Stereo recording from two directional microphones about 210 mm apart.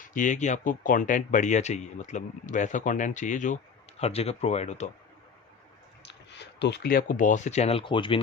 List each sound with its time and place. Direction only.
0.0 s speech: 40° left (ahead or behind)
6.0 s speech: 55° left (ahead or behind); by 8.2 s 25° left (ahead or behind)